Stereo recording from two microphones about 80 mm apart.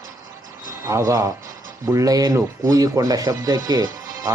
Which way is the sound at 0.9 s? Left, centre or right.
Right.